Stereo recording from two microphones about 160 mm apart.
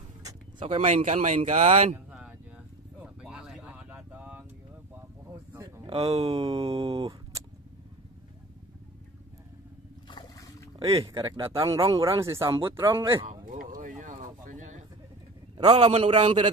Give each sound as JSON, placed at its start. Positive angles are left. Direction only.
{"t": 0.2, "sound": "vehicle", "side_deg": -20}
{"t": 0.7, "sound": "speech", "side_deg": -45}
{"t": 3.0, "sound": "vehicle", "side_deg": -5}
{"t": 5.9, "sound": "speech", "side_deg": -35}
{"t": 10.0, "sound": "a sound", "side_deg": 25}
{"t": 10.8, "sound": "speech", "side_deg": -35}
{"t": 12.0, "sound": "speech", "side_deg": -20}
{"t": 13.3, "sound": "a sound", "side_deg": -55}
{"t": 15.5, "sound": "speech", "side_deg": -35}